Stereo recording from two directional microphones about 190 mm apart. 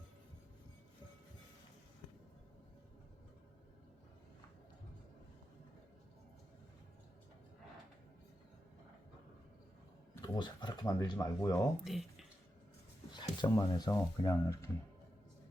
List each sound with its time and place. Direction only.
10.2 s speech: 25° left (ahead or behind)
11.9 s speech: centre (ahead or behind)
13.1 s speech: 25° left (ahead or behind)